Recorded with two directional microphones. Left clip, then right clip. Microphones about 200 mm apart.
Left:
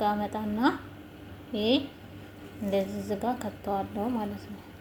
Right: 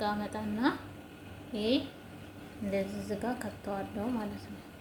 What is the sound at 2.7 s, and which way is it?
A woman's voice, 25° left (ahead or behind).